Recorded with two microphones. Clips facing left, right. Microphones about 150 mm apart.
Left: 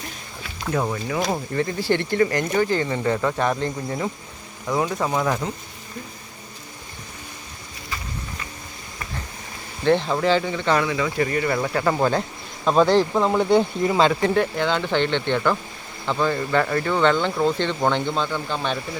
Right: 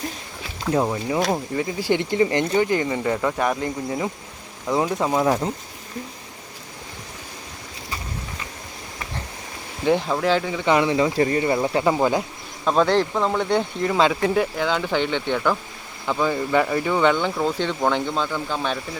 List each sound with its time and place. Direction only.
0.7 s speech: 20° right (ahead or behind)
1.2 s speech: 5° right (ahead or behind)
3.0 s speech: 5° right (ahead or behind); by 5.5 s 25° right (ahead or behind)
9.8 s speech: 5° right (ahead or behind)
10.8 s speech: 30° right (ahead or behind); by 12.2 s 10° right (ahead or behind)
12.6 s speech: 5° left (ahead or behind)